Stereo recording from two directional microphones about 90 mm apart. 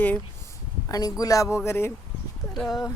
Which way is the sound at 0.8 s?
45° left (ahead or behind).